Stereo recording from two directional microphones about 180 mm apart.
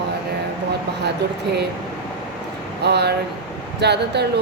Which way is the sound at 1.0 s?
70° right (ahead or behind).